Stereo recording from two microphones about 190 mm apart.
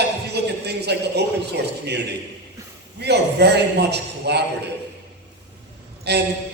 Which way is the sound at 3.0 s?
60° right (ahead or behind).